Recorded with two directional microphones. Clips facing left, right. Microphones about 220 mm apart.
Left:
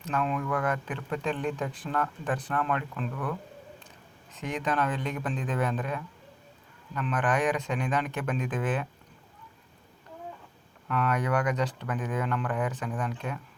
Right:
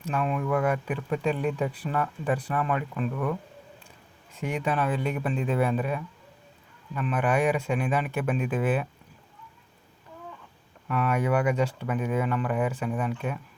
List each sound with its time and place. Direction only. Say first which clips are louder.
0.1 s speech: right 3 dB; 10° right (ahead or behind)
4.4 s speech: right 2 dB; 10° right (ahead or behind)
10.8 s speech: right 2 dB; 5° right (ahead or behind)